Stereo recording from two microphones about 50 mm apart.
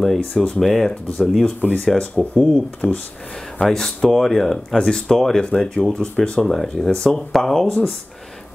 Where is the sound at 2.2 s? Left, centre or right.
Centre.